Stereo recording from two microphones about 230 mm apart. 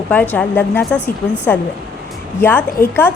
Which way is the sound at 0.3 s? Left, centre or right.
Centre.